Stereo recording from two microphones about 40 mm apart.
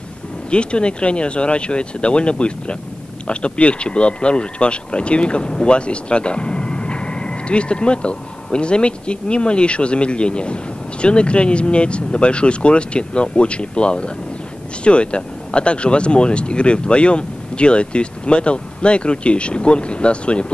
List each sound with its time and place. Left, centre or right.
0.5 s speech: left